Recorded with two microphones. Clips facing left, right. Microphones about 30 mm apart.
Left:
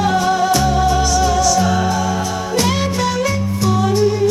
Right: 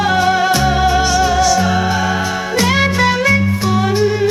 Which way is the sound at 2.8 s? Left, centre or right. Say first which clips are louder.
Right 4 dB; right.